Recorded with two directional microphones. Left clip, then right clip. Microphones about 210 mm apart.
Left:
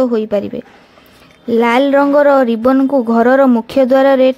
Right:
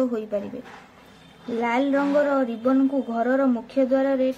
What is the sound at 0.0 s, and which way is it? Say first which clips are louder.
Speech: left 11 dB; 40° left (ahead or behind).